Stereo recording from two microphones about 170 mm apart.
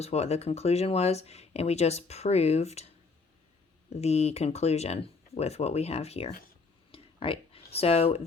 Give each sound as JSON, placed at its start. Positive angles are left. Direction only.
{"t": 0.0, "sound": "speech", "side_deg": 40}
{"t": 3.8, "sound": "speech", "side_deg": 40}
{"t": 6.9, "sound": "a sound", "side_deg": 35}
{"t": 7.8, "sound": "speech", "side_deg": 35}